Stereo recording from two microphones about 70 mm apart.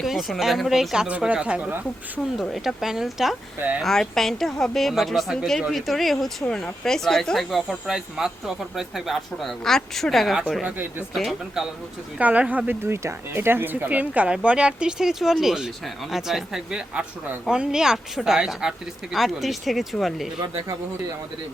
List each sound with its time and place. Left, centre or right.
0.0 s speech: centre
1.0 s speech: centre
2.4 s speech: centre
10.6 s speech: right
12.2 s speech: right
12.8 s speech: right; by 20.2 s centre